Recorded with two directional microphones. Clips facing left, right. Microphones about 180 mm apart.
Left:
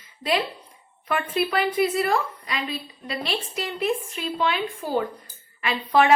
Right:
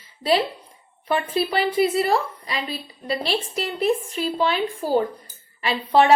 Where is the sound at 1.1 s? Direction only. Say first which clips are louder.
Right 2 dB; 30° right (ahead or behind).